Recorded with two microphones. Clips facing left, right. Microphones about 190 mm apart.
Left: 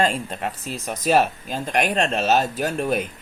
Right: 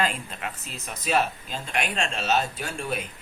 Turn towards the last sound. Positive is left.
turn(degrees=45)  # may be behind; listen again after turning